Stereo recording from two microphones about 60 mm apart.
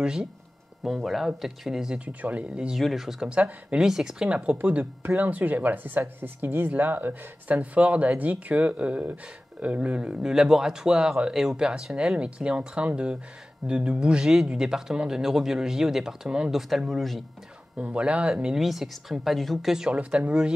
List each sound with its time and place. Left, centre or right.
0.0 s speech: centre
0.8 s speech: centre
2.0 s speech: right
2.5 s speech: centre
2.8 s speech: centre
3.3 s speech: right
3.8 s speech: centre
4.6 s speech: right; by 17.2 s centre
17.8 s speech: centre
18.3 s speech: centre
19.9 s speech: centre